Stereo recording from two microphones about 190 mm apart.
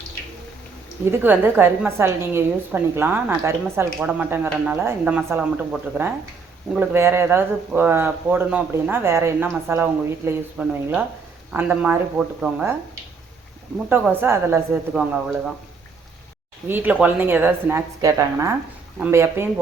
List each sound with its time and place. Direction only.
1.2 s a woman's voice: 10° right (ahead or behind)
13.9 s a woman's voice: 10° right (ahead or behind)
16.6 s a woman's voice: 10° right (ahead or behind)